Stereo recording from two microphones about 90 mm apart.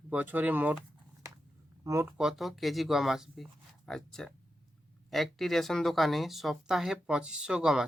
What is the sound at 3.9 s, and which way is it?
Speech, 5° left (ahead or behind).